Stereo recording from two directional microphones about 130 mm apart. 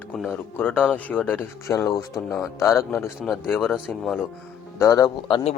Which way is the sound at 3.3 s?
5° right (ahead or behind).